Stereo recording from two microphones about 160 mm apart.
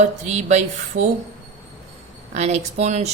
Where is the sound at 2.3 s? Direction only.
45° right (ahead or behind).